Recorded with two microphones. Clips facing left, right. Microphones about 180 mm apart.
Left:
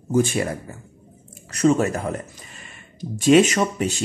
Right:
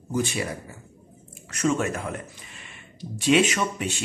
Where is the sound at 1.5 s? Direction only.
35° left (ahead or behind).